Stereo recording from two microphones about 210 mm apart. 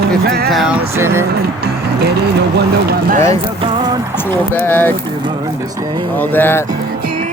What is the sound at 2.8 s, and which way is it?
Speech, 45° right (ahead or behind).